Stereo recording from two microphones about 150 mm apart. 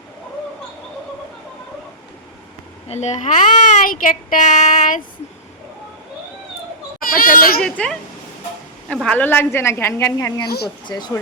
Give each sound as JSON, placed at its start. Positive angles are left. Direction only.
{"t": 2.9, "sound": "speech", "side_deg": 50}
{"t": 7.2, "sound": "speech", "side_deg": 70}
{"t": 7.6, "sound": "a woman's voice", "side_deg": 5}
{"t": 10.4, "sound": "speech", "side_deg": 90}
{"t": 10.8, "sound": "speech", "side_deg": 30}